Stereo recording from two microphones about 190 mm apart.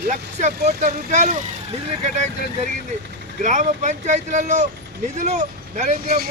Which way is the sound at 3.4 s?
40° right (ahead or behind).